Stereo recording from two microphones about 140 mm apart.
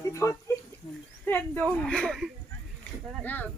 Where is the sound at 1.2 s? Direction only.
10° left (ahead or behind).